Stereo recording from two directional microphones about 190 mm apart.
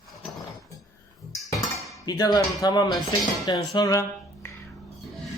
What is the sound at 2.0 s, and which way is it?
Speech, 20° left (ahead or behind).